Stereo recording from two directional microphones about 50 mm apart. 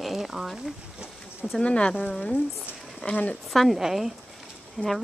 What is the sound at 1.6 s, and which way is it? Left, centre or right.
Speech, left.